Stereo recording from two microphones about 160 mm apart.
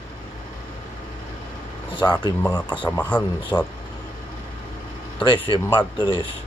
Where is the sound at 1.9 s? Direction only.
30° left (ahead or behind).